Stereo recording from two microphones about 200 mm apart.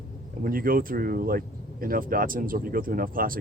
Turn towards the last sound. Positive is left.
turn(degrees=-45)  # may be behind; listen again after turning